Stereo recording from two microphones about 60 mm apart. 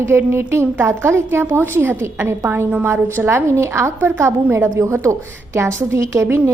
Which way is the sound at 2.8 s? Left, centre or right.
Right.